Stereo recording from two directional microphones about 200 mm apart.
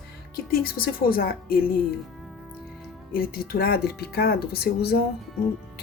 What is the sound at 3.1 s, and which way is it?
Speech, 50° left (ahead or behind).